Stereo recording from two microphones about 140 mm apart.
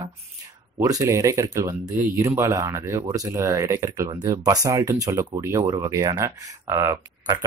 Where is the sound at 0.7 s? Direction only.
25° right (ahead or behind).